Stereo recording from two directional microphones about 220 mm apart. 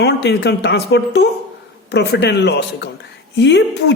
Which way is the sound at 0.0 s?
50° left (ahead or behind).